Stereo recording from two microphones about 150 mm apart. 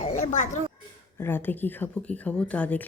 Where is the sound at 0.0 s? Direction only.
50° left (ahead or behind).